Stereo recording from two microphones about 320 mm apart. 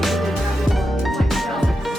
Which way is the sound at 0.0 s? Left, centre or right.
Centre.